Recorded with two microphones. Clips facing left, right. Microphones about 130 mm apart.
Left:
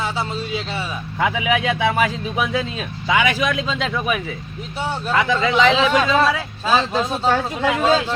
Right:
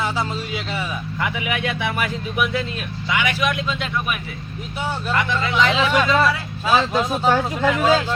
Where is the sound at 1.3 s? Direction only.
90° left.